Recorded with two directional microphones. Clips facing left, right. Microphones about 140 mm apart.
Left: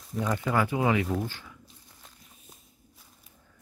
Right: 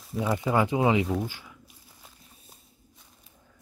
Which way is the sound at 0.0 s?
5° right (ahead or behind).